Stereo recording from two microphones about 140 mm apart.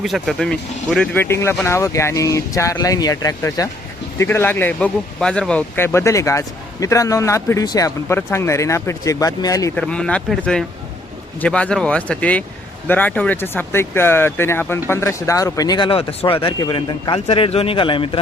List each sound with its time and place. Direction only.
0.0 s speech: centre (ahead or behind)
1.2 s speech: 20° left (ahead or behind)
9.7 s speech: 5° left (ahead or behind); by 18.2 s 40° left (ahead or behind)